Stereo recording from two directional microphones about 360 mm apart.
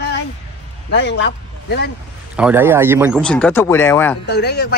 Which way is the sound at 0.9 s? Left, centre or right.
Left.